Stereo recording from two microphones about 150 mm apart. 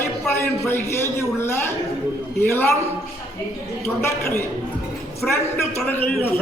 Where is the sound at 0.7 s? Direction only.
15° left (ahead or behind).